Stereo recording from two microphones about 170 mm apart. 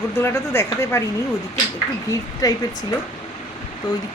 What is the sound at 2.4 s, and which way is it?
Speech, 20° left (ahead or behind).